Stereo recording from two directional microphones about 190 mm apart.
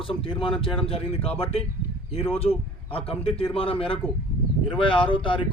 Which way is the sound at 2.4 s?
30° left (ahead or behind).